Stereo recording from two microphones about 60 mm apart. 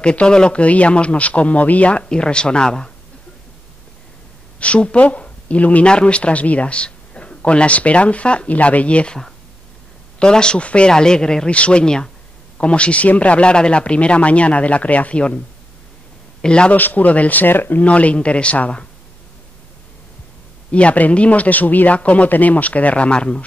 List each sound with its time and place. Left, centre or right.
0.0 s speech: centre
4.6 s a man's voice: centre
16.7 s speech: left
17.8 s speech: left
20.7 s speech: left